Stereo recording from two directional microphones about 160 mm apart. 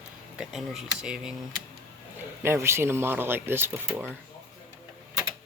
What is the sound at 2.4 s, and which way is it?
Speech, 15° right (ahead or behind).